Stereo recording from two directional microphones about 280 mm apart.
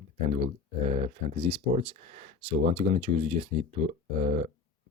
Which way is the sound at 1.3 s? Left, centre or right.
Centre.